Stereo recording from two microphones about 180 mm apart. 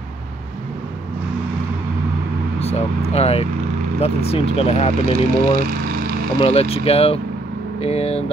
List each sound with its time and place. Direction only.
3.1 s speech: 35° left (ahead or behind)